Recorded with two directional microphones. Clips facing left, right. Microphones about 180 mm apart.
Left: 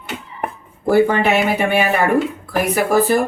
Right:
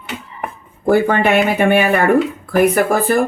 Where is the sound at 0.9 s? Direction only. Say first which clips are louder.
Right 1 dB; 55° right (ahead or behind).